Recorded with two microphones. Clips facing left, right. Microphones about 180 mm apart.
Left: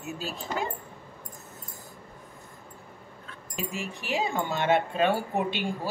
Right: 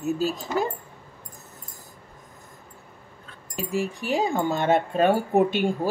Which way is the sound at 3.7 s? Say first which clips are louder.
Right 8 dB; 35° right (ahead or behind).